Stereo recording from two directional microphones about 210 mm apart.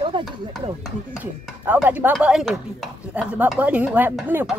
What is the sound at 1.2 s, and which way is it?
Speech, 10° right (ahead or behind).